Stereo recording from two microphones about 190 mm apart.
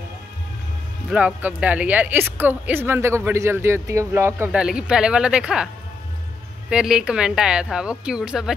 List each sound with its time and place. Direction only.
1.1 s a woman's voice: 5° right (ahead or behind)
6.7 s speech: 5° right (ahead or behind)